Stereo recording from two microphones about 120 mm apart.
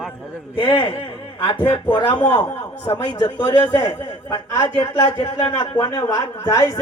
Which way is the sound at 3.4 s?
30° left (ahead or behind).